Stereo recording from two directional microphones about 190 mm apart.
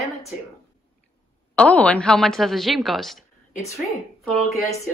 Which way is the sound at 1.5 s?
5° left (ahead or behind).